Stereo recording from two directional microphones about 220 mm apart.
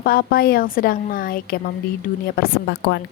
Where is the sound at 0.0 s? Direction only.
40° left (ahead or behind).